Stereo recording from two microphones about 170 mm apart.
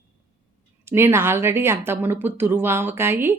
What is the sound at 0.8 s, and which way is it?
Speech, 15° right (ahead or behind).